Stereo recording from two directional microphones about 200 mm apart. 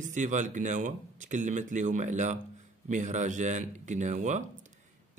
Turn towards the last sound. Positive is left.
turn(degrees=-40)  # may be behind; listen again after turning